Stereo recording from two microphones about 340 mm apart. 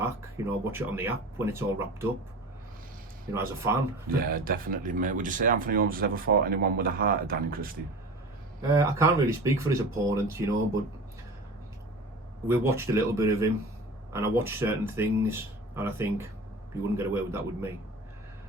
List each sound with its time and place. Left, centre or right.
0.0 s speech: centre
3.3 s speech: centre
4.2 s speech: right
8.6 s speech: centre
12.5 s speech: centre